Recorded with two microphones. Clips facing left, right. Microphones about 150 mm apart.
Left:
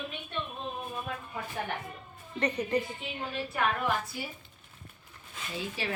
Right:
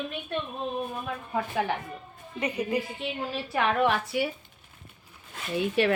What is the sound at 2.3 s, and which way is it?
Speech, 10° right (ahead or behind).